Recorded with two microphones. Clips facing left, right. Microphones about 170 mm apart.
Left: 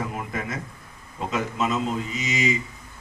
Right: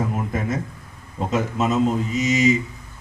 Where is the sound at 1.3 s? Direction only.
45° right (ahead or behind).